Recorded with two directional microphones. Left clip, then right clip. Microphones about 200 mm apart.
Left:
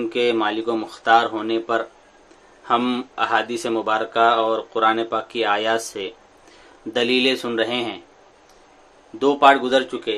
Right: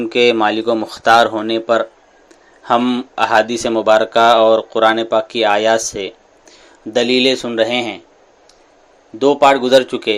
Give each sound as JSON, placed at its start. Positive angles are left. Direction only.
{"t": 0.1, "sound": "a man's voice", "side_deg": -30}
{"t": 3.2, "sound": "speech", "side_deg": -25}
{"t": 9.1, "sound": "speech", "side_deg": -20}